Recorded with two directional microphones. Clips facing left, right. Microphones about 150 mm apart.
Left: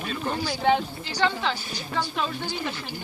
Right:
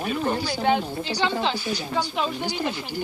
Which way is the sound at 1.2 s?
20° right (ahead or behind).